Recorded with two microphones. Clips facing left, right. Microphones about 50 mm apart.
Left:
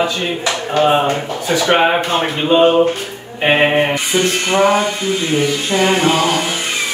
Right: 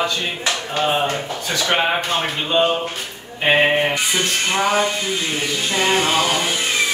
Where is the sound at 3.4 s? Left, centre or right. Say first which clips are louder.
Left 3 dB; centre.